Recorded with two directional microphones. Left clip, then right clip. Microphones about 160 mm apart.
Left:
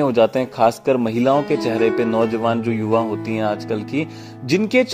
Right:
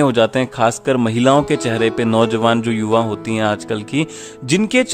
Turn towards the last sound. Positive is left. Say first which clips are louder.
# right 1 dB
turn(degrees=-15)  # may be behind; listen again after turning